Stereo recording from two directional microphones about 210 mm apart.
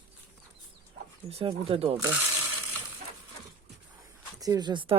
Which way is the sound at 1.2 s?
30° right (ahead or behind).